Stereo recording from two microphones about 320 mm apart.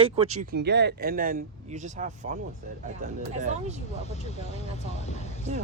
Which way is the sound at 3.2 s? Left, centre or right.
Right.